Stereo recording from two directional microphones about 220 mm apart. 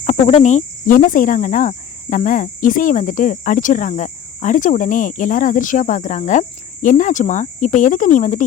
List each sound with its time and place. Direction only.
0.0 s cricket: 30° left (ahead or behind)